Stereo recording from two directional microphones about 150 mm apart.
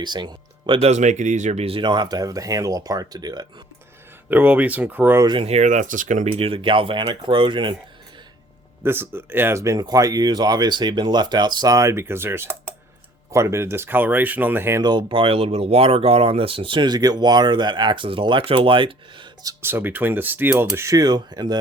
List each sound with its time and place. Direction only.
0.0 s speech: 30° right (ahead or behind)
0.8 s speech: 50° right (ahead or behind); by 3.4 s 25° right (ahead or behind)
4.3 s speech: 10° right (ahead or behind)
5.2 s speech: 30° right (ahead or behind)
5.5 s speech: 55° right (ahead or behind)
6.3 s speech: 40° right (ahead or behind)
8.8 s speech: 15° right (ahead or behind)
14.8 s speech: 35° right (ahead or behind)
19.7 s speech: 15° right (ahead or behind); by 21.6 s 30° right (ahead or behind)